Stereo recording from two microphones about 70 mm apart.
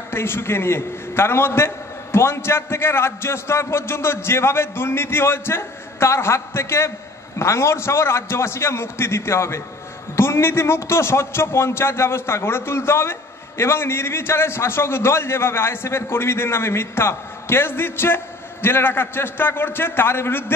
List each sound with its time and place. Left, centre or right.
0.1 s a man's voice: left